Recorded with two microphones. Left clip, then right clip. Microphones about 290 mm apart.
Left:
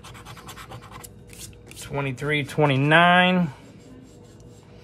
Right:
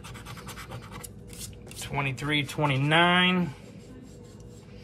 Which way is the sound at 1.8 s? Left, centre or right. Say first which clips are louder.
Left 2 dB; centre.